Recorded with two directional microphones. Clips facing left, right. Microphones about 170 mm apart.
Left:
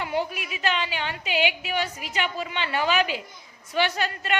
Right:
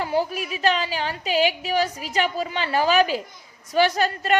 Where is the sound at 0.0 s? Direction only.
35° right (ahead or behind).